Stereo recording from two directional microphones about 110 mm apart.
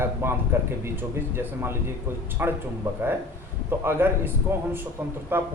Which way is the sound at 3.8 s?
20° right (ahead or behind).